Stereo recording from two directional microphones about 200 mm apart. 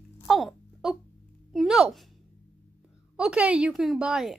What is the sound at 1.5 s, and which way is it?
Speech, centre (ahead or behind).